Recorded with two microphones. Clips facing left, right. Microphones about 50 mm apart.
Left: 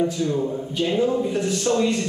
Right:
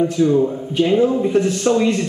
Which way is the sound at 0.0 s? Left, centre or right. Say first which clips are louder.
Right 7 dB; centre.